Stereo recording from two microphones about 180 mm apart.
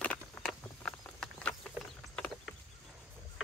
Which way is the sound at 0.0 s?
5° left (ahead or behind).